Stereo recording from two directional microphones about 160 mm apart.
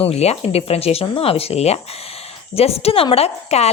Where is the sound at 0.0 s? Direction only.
40° left (ahead or behind).